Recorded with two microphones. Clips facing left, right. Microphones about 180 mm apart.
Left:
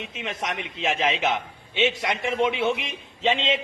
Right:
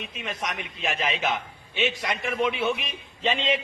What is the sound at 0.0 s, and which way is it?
A man's voice, 25° left (ahead or behind).